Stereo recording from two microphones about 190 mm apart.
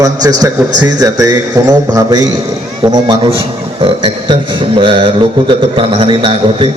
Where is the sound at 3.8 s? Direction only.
25° right (ahead or behind).